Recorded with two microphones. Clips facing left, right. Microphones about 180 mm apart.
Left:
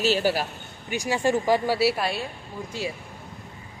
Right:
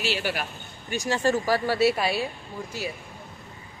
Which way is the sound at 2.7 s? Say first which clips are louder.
Left 3 dB; 25° left (ahead or behind).